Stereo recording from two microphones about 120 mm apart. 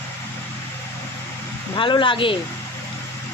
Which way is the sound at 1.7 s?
40° left (ahead or behind).